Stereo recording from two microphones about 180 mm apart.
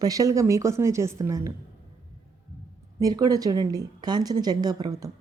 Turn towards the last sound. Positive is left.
turn(degrees=-20)  # may be behind; listen again after turning